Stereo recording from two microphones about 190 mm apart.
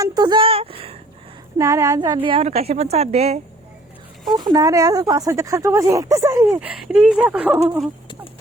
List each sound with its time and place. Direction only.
0.0 s speech: 20° right (ahead or behind)
1.5 s a woman's voice: 15° right (ahead or behind); by 3.4 s 35° right (ahead or behind)
4.4 s speech: 20° right (ahead or behind)
6.6 s speech: 5° right (ahead or behind)